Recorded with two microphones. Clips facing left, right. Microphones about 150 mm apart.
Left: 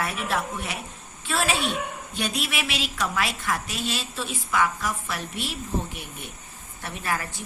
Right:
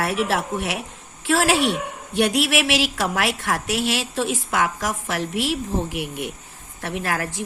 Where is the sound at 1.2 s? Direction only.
90° right.